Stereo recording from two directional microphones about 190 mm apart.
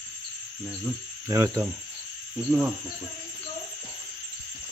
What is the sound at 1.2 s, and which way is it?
Speech, 15° right (ahead or behind).